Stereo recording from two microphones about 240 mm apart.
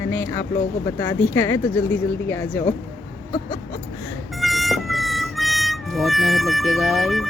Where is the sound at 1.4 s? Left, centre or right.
Centre.